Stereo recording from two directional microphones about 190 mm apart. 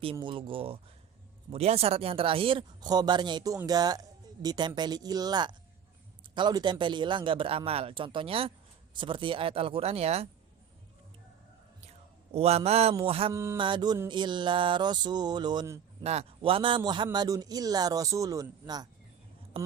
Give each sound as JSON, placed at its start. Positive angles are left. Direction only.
{"t": 0.0, "sound": "a man's voice", "side_deg": -25}
{"t": 11.9, "sound": "a man's voice", "side_deg": -35}
{"t": 13.3, "sound": "a sound", "side_deg": -15}
{"t": 13.6, "sound": "a man's voice", "side_deg": -25}
{"t": 16.0, "sound": "a man's voice", "side_deg": -30}